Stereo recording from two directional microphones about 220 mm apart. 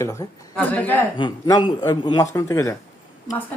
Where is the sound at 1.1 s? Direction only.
20° left (ahead or behind).